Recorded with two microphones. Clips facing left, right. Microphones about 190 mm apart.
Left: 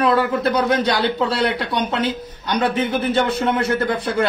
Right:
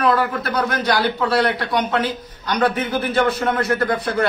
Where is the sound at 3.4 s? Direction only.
25° left (ahead or behind).